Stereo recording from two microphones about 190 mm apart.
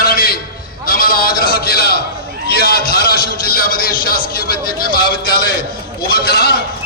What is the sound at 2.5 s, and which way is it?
A man's voice, 55° left (ahead or behind).